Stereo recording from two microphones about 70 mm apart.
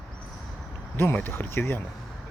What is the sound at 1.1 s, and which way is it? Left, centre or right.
Speech, left.